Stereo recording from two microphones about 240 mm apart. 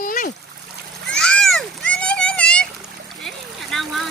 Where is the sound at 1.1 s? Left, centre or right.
Centre.